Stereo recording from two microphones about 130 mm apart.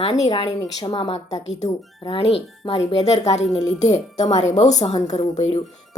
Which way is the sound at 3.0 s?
60° left (ahead or behind).